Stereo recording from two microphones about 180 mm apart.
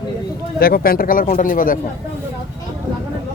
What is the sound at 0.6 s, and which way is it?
A man's voice, 55° left (ahead or behind).